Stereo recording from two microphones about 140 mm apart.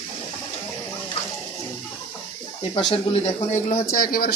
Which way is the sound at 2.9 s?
50° left (ahead or behind).